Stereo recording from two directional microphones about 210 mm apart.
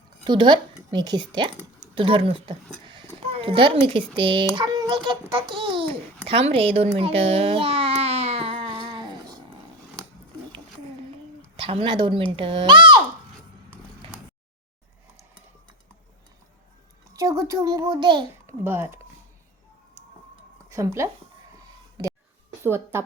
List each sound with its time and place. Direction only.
0.3 s a child's voice: 20° right (ahead or behind)
11.6 s speech: 25° right (ahead or behind)
17.2 s a child's voice: 15° right (ahead or behind)
18.4 s a child's voice: 10° right (ahead or behind)
20.7 s speech: 15° right (ahead or behind)
22.0 s a sound: 20° right (ahead or behind)
22.6 s a child's voice: 10° right (ahead or behind)